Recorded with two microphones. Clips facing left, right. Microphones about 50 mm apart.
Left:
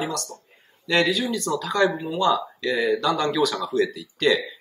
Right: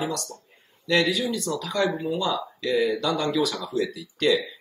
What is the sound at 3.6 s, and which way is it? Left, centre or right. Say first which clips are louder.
Speech: left 4 dB; left.